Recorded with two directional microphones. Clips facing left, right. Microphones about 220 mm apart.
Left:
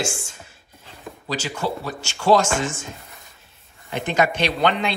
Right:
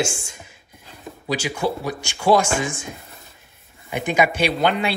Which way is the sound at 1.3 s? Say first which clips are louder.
Right 3 dB; 10° right (ahead or behind).